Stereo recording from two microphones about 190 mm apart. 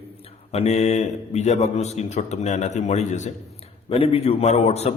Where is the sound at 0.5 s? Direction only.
35° left (ahead or behind).